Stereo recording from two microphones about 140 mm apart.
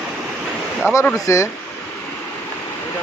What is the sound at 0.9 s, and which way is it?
Speech, 15° left (ahead or behind).